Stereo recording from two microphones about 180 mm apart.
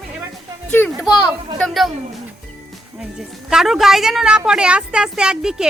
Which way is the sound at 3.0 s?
5° right (ahead or behind).